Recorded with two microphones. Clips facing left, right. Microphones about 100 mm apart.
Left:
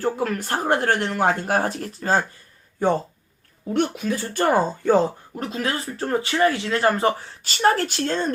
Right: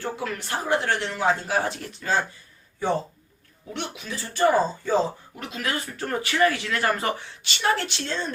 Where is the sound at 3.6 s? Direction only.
45° left (ahead or behind).